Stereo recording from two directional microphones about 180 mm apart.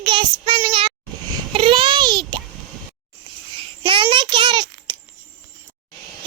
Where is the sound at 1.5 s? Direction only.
30° right (ahead or behind).